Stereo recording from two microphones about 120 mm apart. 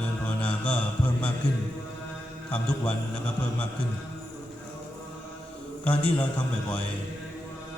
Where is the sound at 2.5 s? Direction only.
10° left (ahead or behind).